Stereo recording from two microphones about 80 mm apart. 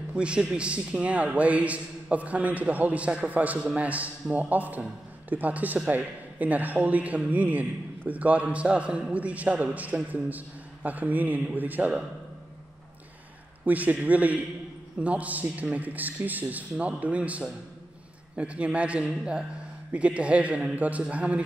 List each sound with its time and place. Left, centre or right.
0.1 s a man's voice: centre
13.7 s a man's voice: centre